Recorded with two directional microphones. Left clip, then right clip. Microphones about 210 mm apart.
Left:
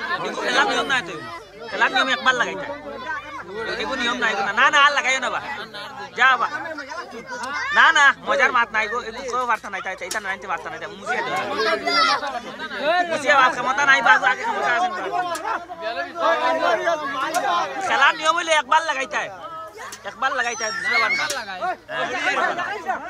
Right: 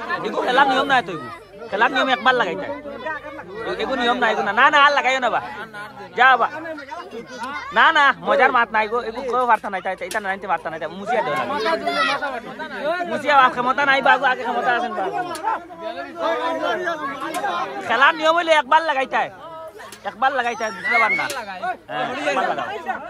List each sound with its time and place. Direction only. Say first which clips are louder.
0.2 s speech: right 5 dB; 5° right (ahead or behind)
4.0 s speech: right 3 dB; centre (ahead or behind)
7.7 s speech: even; centre (ahead or behind)
11.5 s speech: left 3 dB; 15° right (ahead or behind)
12.8 s a man's voice: left 3 dB; 30° left (ahead or behind)
13.2 s speech: right 4 dB; centre (ahead or behind)
16.2 s speech: left 3 dB; 45° left (ahead or behind)
17.7 s speech: right 3 dB; centre (ahead or behind)
22.1 s speech: left 1 dB; 20° right (ahead or behind)